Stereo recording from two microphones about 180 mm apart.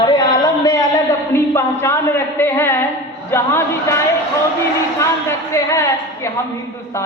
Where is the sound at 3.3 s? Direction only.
15° left (ahead or behind).